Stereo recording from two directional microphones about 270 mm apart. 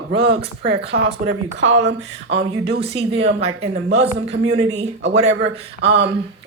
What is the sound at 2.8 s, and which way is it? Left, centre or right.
Speech, right.